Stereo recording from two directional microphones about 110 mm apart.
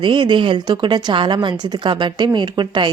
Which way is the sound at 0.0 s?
50° right (ahead or behind).